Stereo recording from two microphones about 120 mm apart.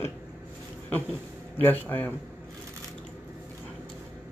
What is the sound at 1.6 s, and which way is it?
Speech, 15° left (ahead or behind).